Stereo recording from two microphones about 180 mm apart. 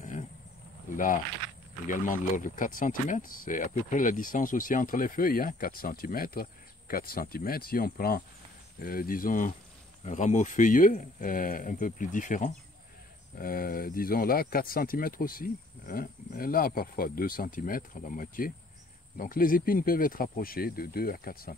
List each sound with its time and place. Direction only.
0.0 s cricket: 45° left (ahead or behind)
1.9 s speech: 45° left (ahead or behind)